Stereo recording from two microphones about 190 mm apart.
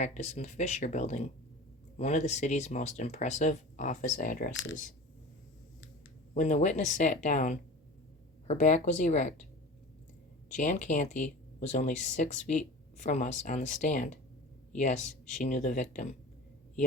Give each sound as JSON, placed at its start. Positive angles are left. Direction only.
{"t": 0.0, "sound": "speech", "side_deg": 40}
{"t": 6.3, "sound": "speech", "side_deg": 40}
{"t": 10.5, "sound": "speech", "side_deg": 40}